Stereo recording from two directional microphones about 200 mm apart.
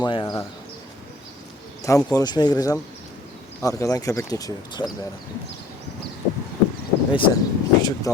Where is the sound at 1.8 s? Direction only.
15° left (ahead or behind).